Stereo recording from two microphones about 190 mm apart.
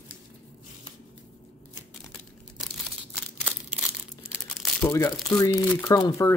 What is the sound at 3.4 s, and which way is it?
Crumpling, 5° right (ahead or behind).